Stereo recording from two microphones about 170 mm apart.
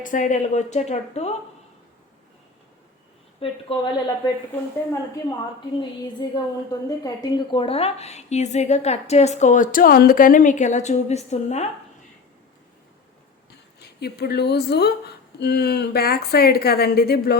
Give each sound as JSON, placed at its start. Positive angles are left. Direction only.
{"t": 0.0, "sound": "a woman's voice", "side_deg": 50}
{"t": 3.4, "sound": "a woman's voice", "side_deg": 30}
{"t": 6.1, "sound": "a woman's voice", "side_deg": 25}
{"t": 14.0, "sound": "a woman's voice", "side_deg": 70}